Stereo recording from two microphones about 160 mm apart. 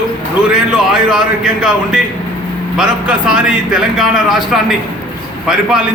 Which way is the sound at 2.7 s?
5° right (ahead or behind).